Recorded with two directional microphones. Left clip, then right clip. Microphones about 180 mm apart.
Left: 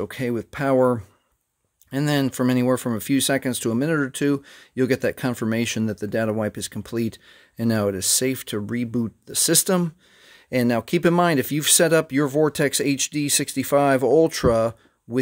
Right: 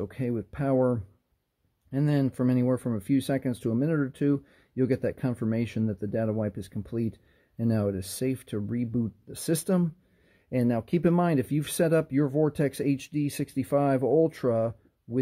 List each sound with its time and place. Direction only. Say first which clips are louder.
0.0 s speech: left 6 dB; 15° left (ahead or behind)